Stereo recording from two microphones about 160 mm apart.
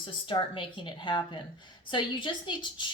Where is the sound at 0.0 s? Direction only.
30° left (ahead or behind).